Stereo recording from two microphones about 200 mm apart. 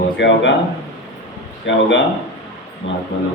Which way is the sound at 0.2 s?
65° left (ahead or behind).